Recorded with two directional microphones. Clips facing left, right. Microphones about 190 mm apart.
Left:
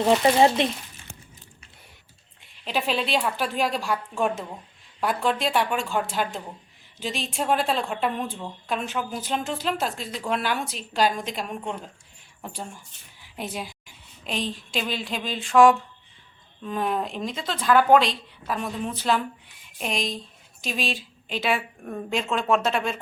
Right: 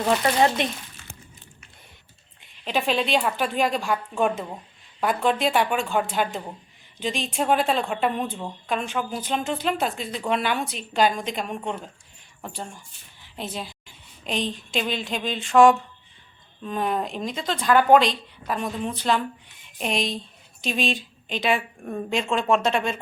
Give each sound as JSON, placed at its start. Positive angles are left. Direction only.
{"t": 0.0, "sound": "speech", "side_deg": 25}
{"t": 2.6, "sound": "speech", "side_deg": 5}
{"t": 4.9, "sound": "speech", "side_deg": 0}
{"t": 13.3, "sound": "a sound", "side_deg": 10}
{"t": 14.3, "sound": "speech", "side_deg": 5}